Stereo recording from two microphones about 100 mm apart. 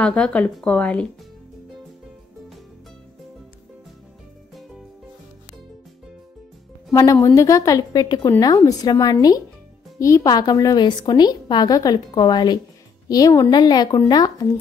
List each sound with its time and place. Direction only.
0.0 s speech: 10° left (ahead or behind)
6.9 s a woman's voice: 35° left (ahead or behind)
13.1 s a woman's voice: 35° left (ahead or behind)